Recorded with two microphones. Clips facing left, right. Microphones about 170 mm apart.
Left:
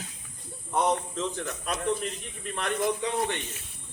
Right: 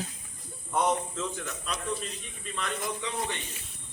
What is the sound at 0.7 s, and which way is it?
Speech, 30° left (ahead or behind).